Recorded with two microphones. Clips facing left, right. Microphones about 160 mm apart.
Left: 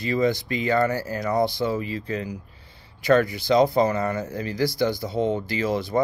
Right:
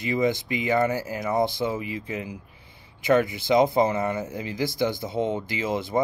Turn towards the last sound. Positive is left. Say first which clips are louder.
# left 2 dB
turn(degrees=-20)  # may be behind; listen again after turning